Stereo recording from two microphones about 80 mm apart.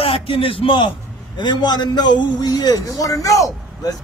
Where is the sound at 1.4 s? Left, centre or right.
Left.